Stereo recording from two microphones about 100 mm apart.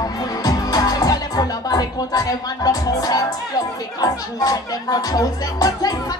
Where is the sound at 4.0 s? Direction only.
40° left (ahead or behind).